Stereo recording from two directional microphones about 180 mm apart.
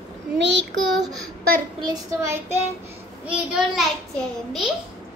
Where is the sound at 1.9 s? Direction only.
20° right (ahead or behind).